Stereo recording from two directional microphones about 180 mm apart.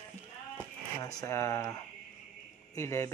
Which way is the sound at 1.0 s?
20° left (ahead or behind).